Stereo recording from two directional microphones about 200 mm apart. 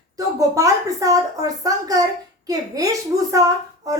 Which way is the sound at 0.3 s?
15° right (ahead or behind).